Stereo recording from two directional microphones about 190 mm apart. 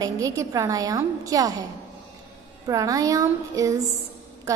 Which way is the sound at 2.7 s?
20° right (ahead or behind).